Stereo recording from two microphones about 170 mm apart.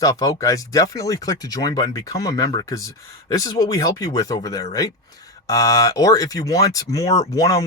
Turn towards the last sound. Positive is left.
turn(degrees=20)  # may be behind; listen again after turning